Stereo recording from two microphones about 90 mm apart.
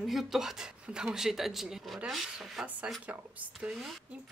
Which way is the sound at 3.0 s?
15° right (ahead or behind).